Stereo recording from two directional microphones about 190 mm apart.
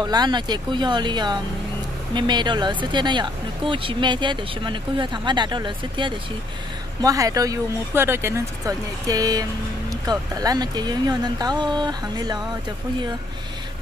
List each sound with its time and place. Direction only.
0.0 s speech: 20° right (ahead or behind)